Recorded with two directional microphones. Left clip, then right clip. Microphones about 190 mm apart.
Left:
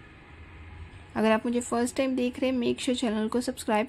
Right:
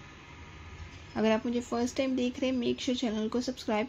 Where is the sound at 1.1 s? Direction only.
20° left (ahead or behind).